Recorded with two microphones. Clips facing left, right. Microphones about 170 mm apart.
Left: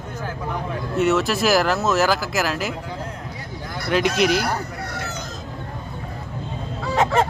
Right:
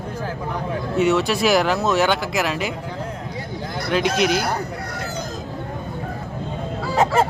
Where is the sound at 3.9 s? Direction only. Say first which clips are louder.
Left 1 dB; centre (ahead or behind).